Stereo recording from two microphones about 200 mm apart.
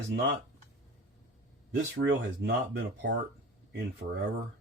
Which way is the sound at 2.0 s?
60° right (ahead or behind).